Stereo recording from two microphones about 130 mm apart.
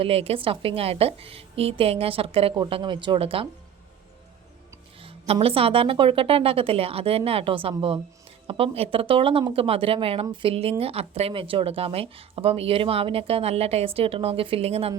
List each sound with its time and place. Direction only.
0.0 s speech: 50° right (ahead or behind)
5.0 s speech: 50° right (ahead or behind)